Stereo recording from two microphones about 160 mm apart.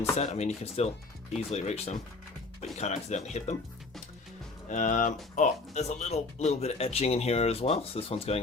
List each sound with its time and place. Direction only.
0.2 s speech: 45° left (ahead or behind)
4.7 s speech: 50° left (ahead or behind)